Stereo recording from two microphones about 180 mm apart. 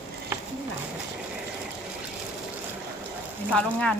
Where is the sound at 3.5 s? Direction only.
5° left (ahead or behind).